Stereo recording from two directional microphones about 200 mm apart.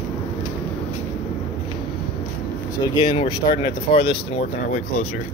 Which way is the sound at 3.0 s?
25° left (ahead or behind).